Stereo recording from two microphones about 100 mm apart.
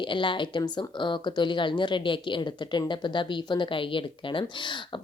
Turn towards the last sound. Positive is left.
turn(degrees=50)  # may be behind; listen again after turning